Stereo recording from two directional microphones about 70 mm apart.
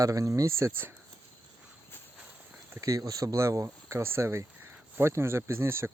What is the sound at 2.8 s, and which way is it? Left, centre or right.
Speech, right.